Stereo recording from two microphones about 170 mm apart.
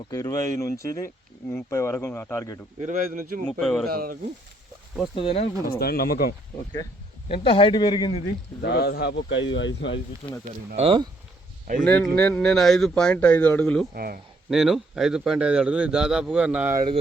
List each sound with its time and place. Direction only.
0.0 s speech: 20° left (ahead or behind)
2.8 s speech: 55° right (ahead or behind)
3.4 s a man's voice: centre (ahead or behind)
3.8 s speech: 60° right (ahead or behind)
5.1 s a man's voice: 35° left (ahead or behind)
5.8 s speech: 65° left (ahead or behind)
7.3 s a man's voice: 35° left (ahead or behind)
8.6 s a man's voice: 70° left (ahead or behind); by 10.0 s 90° left
10.8 s speech: 30° right (ahead or behind)
11.9 s a man's voice: 5° left (ahead or behind)
13.9 s speech: 60° right (ahead or behind)
14.5 s a man's voice: centre (ahead or behind)